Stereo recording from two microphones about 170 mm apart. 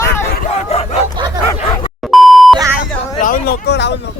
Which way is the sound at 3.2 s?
55° left (ahead or behind).